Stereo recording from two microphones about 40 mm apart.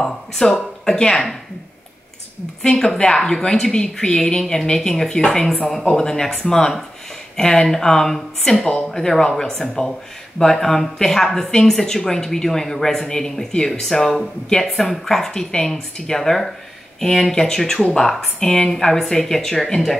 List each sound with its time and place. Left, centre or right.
0.5 s speech: left
2.6 s speech: centre